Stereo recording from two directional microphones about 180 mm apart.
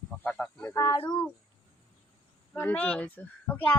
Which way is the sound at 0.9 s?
25° left (ahead or behind).